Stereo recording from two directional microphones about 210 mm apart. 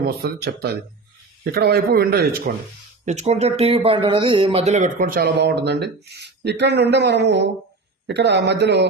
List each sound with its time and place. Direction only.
0.0 s speech: 50° right (ahead or behind)
3.1 s a man's voice: 30° right (ahead or behind); by 8.9 s 55° right (ahead or behind)